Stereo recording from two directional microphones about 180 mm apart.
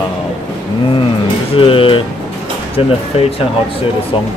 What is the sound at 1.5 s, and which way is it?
Music, 30° left (ahead or behind).